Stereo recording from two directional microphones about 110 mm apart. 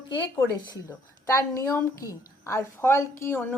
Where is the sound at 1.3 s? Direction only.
25° left (ahead or behind).